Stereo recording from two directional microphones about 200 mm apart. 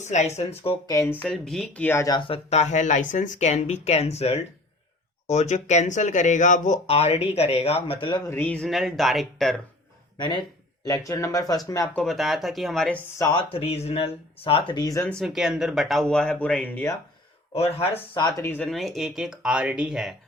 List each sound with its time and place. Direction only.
0.0 s speech: 35° left (ahead or behind); by 1.2 s 15° left (ahead or behind)
1.2 s speech: centre (ahead or behind); by 8.2 s 25° left (ahead or behind)
8.3 s speech: 10° left (ahead or behind)
10.2 s speech: 25° left (ahead or behind)
11.9 s speech: centre (ahead or behind)
13.1 s speech: 20° left (ahead or behind)
15.2 s speech: centre (ahead or behind)
17.5 s speech: 30° left (ahead or behind); by 20.1 s 5° right (ahead or behind)